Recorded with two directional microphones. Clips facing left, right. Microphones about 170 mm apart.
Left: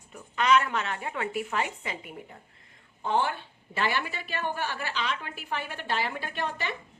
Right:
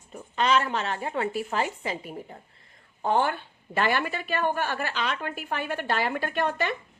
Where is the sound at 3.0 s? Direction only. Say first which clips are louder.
Right 3 dB; 50° right (ahead or behind).